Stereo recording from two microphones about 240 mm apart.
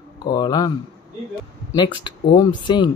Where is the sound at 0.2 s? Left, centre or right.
Centre.